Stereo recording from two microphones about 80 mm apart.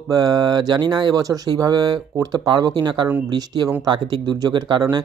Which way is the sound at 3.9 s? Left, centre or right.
Right.